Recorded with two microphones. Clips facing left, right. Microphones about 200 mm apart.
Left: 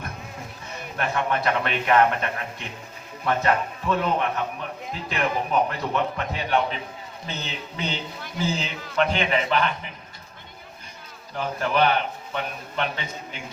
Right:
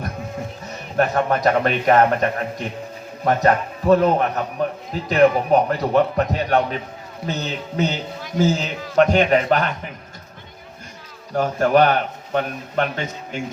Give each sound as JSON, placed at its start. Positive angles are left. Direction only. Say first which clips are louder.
{"t": 0.9, "sound": "a man's voice", "louder": "right 7 dB", "side_deg": -40}
{"t": 11.3, "sound": "a man's voice", "louder": "right 7 dB", "side_deg": -45}